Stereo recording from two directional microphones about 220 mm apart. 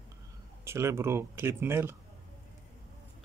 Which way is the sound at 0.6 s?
10° right (ahead or behind).